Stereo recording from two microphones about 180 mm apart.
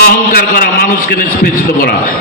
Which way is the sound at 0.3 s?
55° left (ahead or behind).